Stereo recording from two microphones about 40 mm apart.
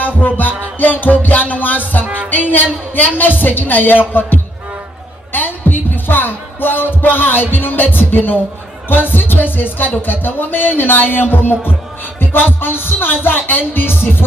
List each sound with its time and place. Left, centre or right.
0.0 s music: left
2.9 s a woman's voice: left
4.1 s music: left